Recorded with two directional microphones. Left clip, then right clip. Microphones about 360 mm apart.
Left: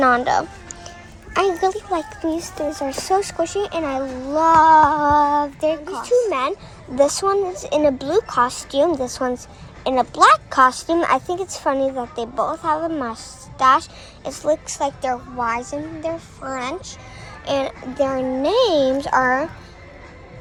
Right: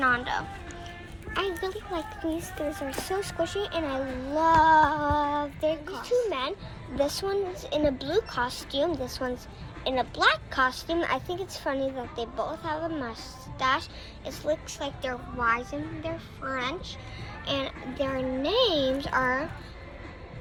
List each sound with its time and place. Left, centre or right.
0.0 s speech: left
2.6 s speech: left
3.0 s speech: left